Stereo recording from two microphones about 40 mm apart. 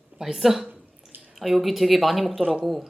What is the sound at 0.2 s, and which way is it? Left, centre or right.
A woman's voice, centre.